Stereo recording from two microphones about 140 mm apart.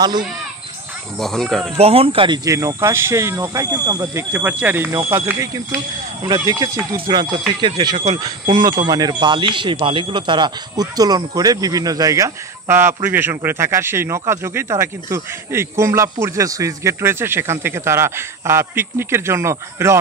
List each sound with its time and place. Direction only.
1.1 s speech: centre (ahead or behind)
1.8 s speech: 45° right (ahead or behind); by 4.3 s 25° right (ahead or behind)
4.3 s speech: 10° right (ahead or behind)